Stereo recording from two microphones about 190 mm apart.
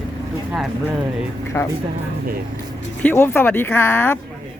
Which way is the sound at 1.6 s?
10° left (ahead or behind).